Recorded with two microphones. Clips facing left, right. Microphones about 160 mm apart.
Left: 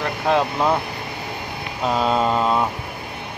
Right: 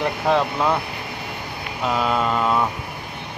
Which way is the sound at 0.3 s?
Centre (ahead or behind).